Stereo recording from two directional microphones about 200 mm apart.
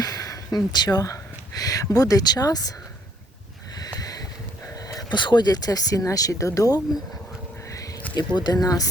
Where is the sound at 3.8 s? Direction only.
20° left (ahead or behind).